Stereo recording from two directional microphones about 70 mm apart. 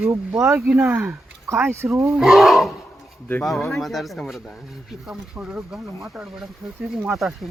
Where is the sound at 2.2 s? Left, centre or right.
Centre.